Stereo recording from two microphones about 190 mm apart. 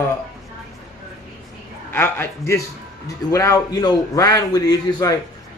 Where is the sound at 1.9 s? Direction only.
15° left (ahead or behind).